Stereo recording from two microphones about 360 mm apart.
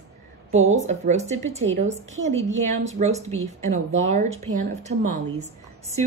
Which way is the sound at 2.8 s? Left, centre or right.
Centre.